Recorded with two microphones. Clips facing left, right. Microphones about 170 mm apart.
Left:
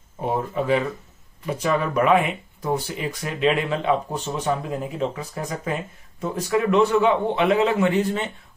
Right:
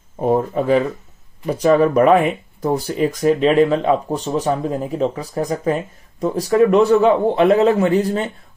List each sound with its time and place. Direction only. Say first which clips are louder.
0.2 s speech: right 7 dB; 40° right (ahead or behind)